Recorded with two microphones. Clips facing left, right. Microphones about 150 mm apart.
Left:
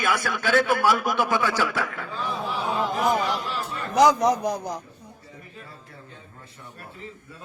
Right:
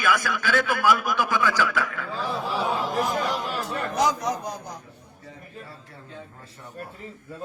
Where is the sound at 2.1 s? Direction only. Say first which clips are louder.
Right 1 dB; 35° right (ahead or behind).